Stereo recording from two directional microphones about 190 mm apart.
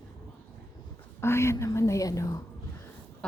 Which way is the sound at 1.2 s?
15° left (ahead or behind).